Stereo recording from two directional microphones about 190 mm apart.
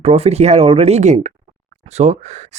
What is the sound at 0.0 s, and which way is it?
Speech, 35° right (ahead or behind).